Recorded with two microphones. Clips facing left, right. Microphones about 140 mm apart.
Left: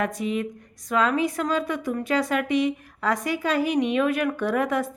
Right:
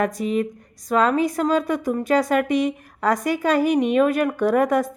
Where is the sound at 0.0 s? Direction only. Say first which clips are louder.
Right 4 dB; 40° right (ahead or behind).